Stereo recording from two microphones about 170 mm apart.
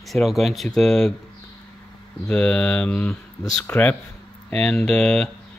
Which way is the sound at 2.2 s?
5° left (ahead or behind).